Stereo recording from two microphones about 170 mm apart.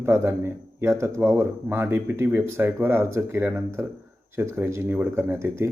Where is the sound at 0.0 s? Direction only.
15° right (ahead or behind).